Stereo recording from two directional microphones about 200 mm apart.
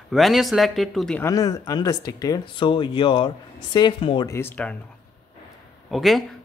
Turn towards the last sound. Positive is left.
turn(degrees=0)  # may be behind; listen again after turning